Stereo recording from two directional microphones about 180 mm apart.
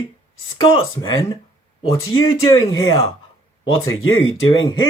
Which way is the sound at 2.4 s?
20° left (ahead or behind).